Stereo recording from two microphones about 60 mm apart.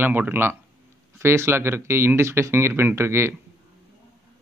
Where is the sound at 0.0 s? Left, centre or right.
Right.